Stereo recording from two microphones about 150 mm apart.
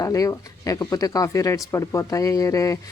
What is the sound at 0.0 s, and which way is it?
Speech, 20° left (ahead or behind).